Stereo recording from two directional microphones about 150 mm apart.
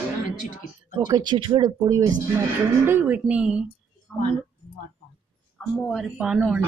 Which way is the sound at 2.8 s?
15° right (ahead or behind).